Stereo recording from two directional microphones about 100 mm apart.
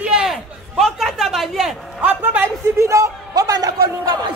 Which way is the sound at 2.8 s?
30° right (ahead or behind).